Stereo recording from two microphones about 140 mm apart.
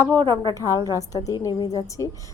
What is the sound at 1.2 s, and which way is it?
Speech, 25° left (ahead or behind).